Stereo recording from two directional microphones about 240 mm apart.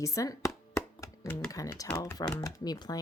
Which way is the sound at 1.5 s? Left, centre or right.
Centre.